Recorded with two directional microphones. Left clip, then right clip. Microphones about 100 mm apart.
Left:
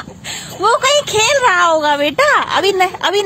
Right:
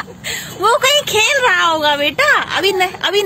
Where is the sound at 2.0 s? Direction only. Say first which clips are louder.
Left 1 dB; 90° left.